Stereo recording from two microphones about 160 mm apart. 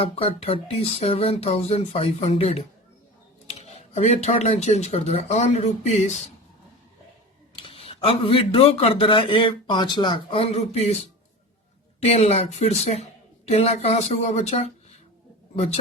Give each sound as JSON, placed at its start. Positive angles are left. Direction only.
{"t": 0.0, "sound": "speech", "side_deg": 35}
{"t": 7.5, "sound": "speech", "side_deg": 35}